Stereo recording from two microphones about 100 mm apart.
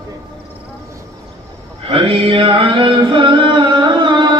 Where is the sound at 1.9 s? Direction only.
70° right (ahead or behind).